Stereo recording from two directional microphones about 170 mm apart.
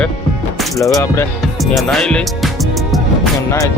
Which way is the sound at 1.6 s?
Centre (ahead or behind).